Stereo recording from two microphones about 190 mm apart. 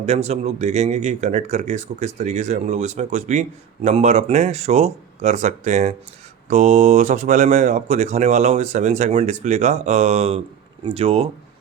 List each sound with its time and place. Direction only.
0.0 s speech: 35° right (ahead or behind)